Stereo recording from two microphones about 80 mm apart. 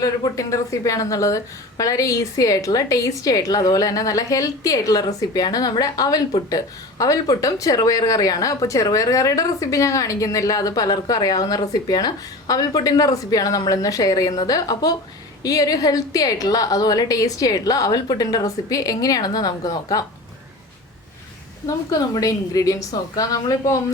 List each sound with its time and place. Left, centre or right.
0.0 s speech: left
21.7 s speech: left